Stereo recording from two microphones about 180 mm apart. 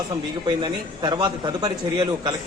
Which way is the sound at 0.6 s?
25° right (ahead or behind).